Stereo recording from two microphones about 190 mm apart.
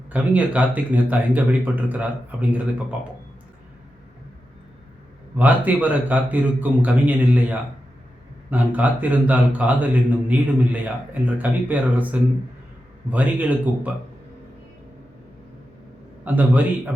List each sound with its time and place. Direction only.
0.1 s speech: 5° right (ahead or behind)
5.4 s speech: 10° right (ahead or behind)
8.4 s speech: 10° right (ahead or behind)
16.2 s speech: 10° right (ahead or behind)